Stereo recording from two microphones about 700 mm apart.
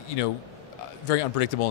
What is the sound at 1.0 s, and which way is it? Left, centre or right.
Speech, left.